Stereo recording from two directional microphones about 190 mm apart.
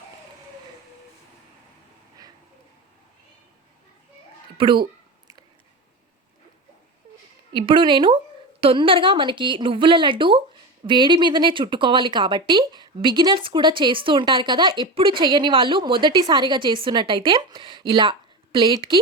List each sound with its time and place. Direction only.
4.5 s a child's voice: 25° right (ahead or behind)
7.5 s a woman's voice: 25° right (ahead or behind)